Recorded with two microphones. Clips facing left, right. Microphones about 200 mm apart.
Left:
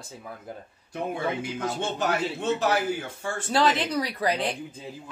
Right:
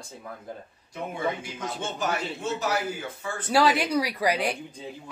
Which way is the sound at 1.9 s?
65° left (ahead or behind).